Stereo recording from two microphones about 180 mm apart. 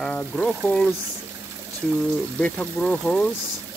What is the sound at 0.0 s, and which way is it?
Speech, 5° left (ahead or behind).